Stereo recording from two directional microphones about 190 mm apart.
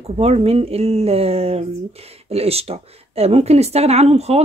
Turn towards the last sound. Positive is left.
turn(degrees=-35)  # may be behind; listen again after turning